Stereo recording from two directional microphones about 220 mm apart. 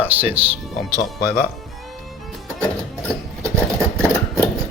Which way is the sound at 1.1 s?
40° left (ahead or behind).